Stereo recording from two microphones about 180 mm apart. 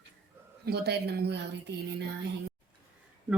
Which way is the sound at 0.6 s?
65° right (ahead or behind).